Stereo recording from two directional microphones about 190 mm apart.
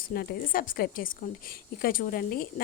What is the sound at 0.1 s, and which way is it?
A woman's voice, 55° left (ahead or behind).